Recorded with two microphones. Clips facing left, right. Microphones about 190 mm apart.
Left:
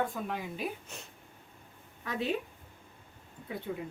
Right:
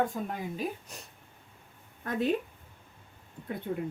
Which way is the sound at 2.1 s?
50° right (ahead or behind).